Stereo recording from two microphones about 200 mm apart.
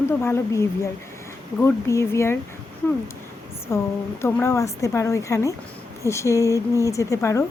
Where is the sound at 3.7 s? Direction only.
10° left (ahead or behind).